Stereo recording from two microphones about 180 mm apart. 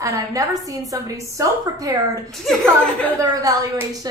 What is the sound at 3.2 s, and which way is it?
Speech, 20° right (ahead or behind).